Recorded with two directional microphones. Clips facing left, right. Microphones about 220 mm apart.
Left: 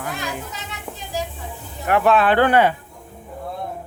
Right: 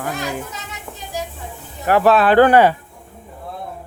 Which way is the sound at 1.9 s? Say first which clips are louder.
Right 3 dB; 35° right (ahead or behind).